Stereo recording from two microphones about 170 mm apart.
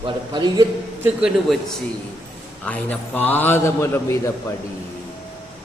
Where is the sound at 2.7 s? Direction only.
10° left (ahead or behind).